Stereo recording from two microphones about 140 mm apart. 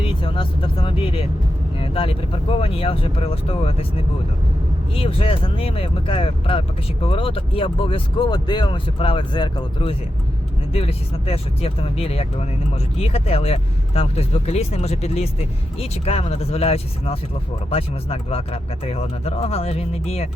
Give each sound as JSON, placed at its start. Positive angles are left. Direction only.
{"t": 0.0, "sound": "speech", "side_deg": 40}
{"t": 4.9, "sound": "speech", "side_deg": 40}